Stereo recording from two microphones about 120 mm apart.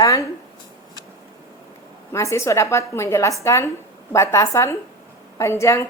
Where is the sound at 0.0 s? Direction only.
25° left (ahead or behind).